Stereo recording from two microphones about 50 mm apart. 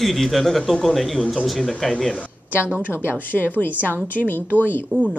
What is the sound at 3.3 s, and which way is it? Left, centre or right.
Speech, centre.